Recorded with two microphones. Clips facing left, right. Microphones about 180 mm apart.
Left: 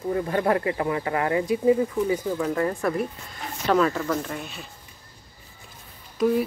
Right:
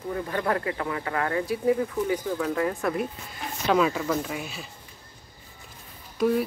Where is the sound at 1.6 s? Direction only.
10° left (ahead or behind).